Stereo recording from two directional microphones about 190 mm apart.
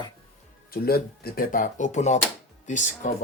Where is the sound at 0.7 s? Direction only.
50° left (ahead or behind).